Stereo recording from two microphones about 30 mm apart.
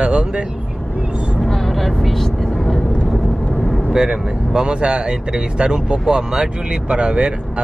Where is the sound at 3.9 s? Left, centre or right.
Right.